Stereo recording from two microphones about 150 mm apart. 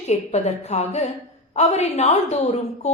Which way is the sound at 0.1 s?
50° left (ahead or behind).